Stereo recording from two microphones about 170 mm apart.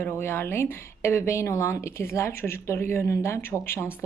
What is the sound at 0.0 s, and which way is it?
A woman's voice, 15° left (ahead or behind).